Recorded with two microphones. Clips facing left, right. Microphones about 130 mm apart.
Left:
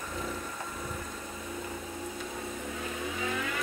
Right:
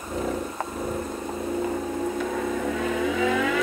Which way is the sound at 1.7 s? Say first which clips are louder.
Right 12 dB; 65° right (ahead or behind).